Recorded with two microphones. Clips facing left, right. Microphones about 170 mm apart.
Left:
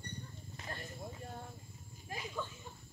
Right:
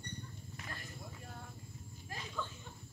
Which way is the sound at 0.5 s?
30° left (ahead or behind).